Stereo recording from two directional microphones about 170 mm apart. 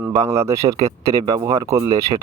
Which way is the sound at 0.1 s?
20° right (ahead or behind).